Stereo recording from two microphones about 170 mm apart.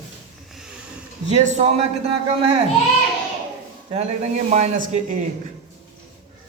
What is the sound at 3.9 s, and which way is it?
A man's voice, 40° right (ahead or behind).